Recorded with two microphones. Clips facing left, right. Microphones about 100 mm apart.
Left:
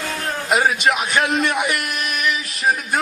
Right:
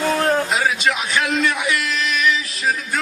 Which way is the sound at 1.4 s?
50° left (ahead or behind).